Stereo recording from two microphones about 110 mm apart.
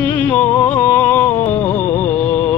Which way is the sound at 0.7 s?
20° left (ahead or behind).